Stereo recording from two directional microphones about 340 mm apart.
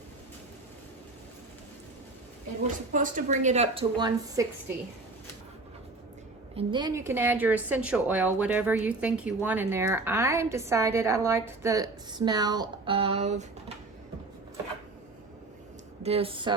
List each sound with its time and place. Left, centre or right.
2.9 s a woman's voice: right
6.6 s speech: centre
16.0 s speech: centre